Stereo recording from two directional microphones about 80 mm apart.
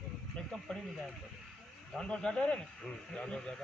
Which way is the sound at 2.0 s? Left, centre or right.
Centre.